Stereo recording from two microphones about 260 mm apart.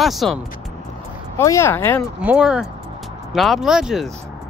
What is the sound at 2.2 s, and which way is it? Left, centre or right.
Speech, centre.